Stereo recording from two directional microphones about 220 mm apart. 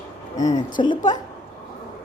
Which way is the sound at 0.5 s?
20° left (ahead or behind).